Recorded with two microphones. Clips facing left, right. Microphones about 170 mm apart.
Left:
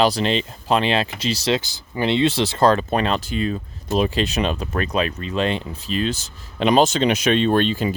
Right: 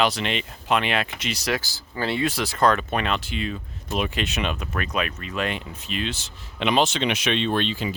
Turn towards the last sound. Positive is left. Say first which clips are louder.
# left 6 dB
turn(degrees=45)  # may be behind; listen again after turning